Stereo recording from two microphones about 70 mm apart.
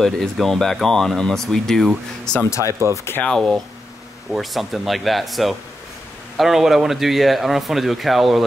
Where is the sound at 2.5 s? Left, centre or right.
Left.